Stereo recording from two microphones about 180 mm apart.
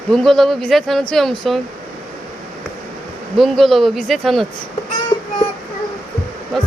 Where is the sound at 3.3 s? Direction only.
Centre (ahead or behind).